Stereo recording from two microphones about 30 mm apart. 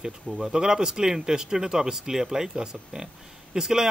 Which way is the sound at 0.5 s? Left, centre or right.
Right.